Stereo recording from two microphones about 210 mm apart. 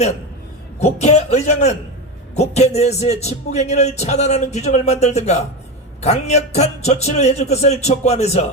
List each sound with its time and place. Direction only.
0.8 s a man's voice: 30° left (ahead or behind)